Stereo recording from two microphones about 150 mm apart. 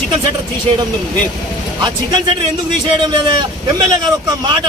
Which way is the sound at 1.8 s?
30° right (ahead or behind).